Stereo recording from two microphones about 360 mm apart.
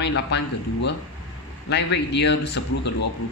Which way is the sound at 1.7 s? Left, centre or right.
Left.